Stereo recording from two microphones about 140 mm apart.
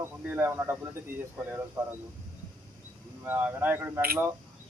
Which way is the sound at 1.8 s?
25° right (ahead or behind).